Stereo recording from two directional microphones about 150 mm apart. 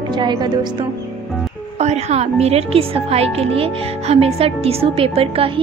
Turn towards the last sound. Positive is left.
turn(degrees=-40)  # may be behind; listen again after turning